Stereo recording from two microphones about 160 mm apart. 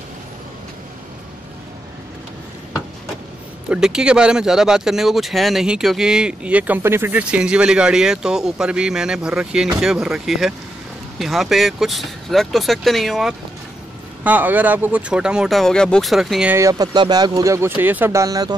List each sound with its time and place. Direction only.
3.6 s speech: 5° right (ahead or behind)
16.5 s speech: 20° right (ahead or behind)